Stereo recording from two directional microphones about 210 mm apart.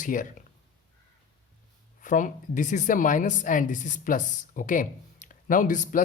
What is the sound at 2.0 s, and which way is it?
A woman's voice, 40° left (ahead or behind).